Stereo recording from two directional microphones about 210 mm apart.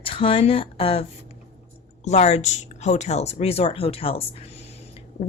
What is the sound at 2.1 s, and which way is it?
A woman's voice, 30° left (ahead or behind).